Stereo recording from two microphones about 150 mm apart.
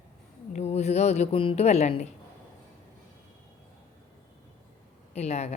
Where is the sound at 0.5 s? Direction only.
45° left (ahead or behind).